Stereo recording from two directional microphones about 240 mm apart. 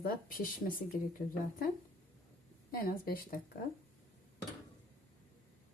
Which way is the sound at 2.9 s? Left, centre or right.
Left.